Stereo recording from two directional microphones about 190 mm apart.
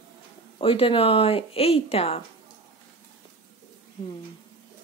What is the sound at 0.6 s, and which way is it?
Speech, 30° left (ahead or behind).